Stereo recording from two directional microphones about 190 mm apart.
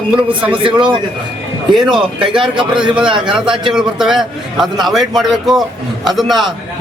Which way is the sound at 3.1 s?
25° right (ahead or behind).